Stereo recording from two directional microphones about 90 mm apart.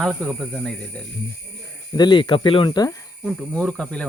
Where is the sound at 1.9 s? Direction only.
55° left (ahead or behind); by 2.7 s 70° left (ahead or behind).